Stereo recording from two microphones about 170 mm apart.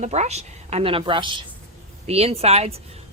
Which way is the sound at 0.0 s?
40° right (ahead or behind).